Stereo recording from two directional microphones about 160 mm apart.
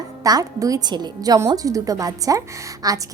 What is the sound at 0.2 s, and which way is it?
A woman's voice, 20° right (ahead or behind).